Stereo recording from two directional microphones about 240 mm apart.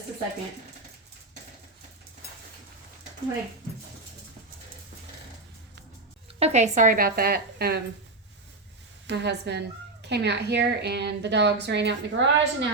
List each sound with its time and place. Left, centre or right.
6.4 s a woman's voice: right
9.0 s a woman's voice: right